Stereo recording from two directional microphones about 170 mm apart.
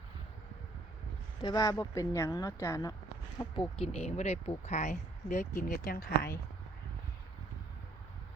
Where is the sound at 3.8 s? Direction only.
35° left (ahead or behind); by 6.3 s 55° left (ahead or behind).